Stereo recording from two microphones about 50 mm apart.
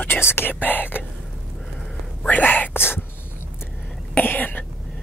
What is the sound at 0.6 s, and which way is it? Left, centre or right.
Whispering, left.